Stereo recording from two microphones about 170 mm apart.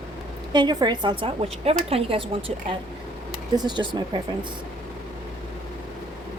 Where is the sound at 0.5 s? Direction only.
25° right (ahead or behind).